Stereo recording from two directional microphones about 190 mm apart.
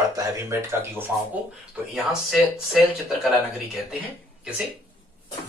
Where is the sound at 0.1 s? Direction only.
15° right (ahead or behind).